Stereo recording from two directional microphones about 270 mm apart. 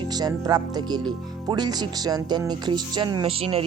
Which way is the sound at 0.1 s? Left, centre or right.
Centre.